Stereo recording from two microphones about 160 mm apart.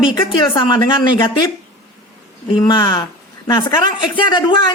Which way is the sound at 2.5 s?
30° left (ahead or behind).